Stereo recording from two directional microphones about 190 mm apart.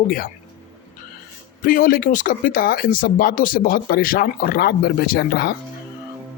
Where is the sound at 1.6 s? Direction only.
50° left (ahead or behind).